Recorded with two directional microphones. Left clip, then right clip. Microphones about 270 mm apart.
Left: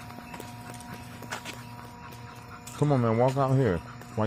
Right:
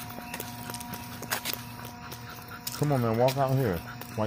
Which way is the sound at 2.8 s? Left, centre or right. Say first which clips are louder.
Left 1 dB; left.